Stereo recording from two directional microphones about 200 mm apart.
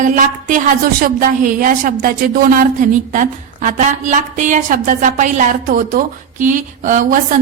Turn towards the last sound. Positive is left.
turn(degrees=-40)  # may be behind; listen again after turning